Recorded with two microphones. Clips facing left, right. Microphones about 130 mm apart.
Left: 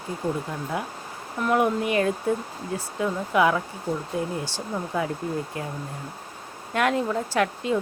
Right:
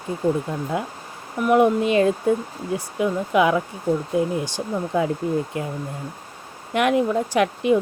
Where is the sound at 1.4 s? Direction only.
20° right (ahead or behind).